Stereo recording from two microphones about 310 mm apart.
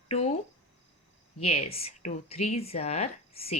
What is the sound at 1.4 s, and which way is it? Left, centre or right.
Speech, centre.